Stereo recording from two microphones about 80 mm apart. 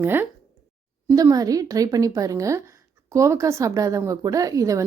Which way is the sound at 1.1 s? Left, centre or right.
Right.